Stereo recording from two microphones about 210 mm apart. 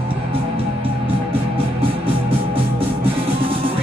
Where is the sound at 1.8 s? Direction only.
25° right (ahead or behind).